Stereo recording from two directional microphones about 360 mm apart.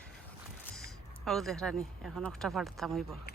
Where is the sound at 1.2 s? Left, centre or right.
Centre.